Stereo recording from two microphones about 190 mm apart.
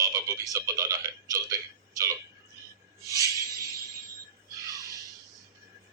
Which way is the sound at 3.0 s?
15° right (ahead or behind).